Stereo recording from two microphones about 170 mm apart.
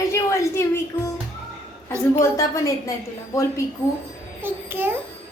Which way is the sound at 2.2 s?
20° left (ahead or behind).